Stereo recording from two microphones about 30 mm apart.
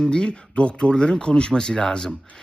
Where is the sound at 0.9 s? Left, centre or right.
Left.